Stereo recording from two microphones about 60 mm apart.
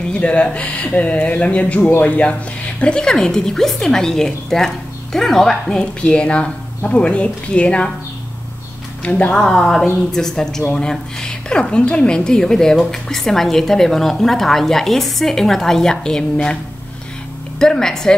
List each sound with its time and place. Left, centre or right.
0.1 s a woman's voice: centre
9.0 s a woman's voice: centre
17.6 s a woman's voice: centre